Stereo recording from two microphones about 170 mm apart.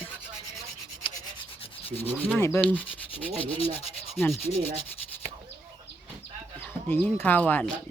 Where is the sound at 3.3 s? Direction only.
35° left (ahead or behind).